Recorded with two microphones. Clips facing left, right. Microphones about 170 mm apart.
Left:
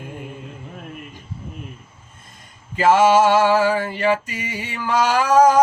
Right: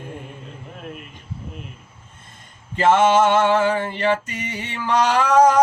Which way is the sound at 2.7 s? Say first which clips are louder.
Left 1 dB; 5° left (ahead or behind).